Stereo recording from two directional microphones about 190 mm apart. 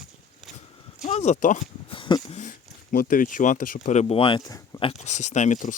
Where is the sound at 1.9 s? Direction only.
25° left (ahead or behind).